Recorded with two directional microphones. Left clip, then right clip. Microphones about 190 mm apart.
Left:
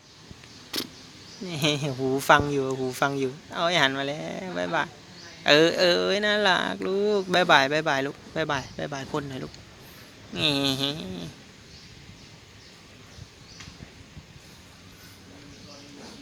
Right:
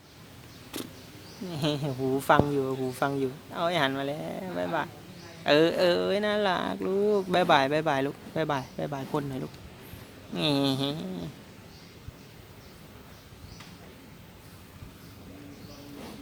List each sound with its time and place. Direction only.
0.7 s vehicle: 15° left (ahead or behind)
1.5 s speech: 15° left (ahead or behind); by 9.5 s centre (ahead or behind)
10.3 s a sound: centre (ahead or behind)